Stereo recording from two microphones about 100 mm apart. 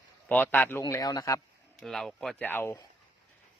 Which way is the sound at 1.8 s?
5° left (ahead or behind).